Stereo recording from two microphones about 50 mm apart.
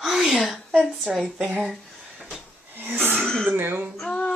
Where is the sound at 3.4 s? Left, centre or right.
Right.